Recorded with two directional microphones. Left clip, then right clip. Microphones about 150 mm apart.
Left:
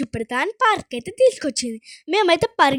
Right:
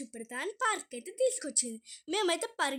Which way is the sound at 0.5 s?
50° left (ahead or behind).